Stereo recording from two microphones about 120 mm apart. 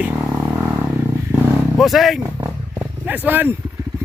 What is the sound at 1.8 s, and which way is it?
Speech, centre (ahead or behind).